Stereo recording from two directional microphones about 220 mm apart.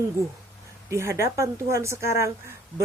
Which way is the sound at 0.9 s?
10° right (ahead or behind).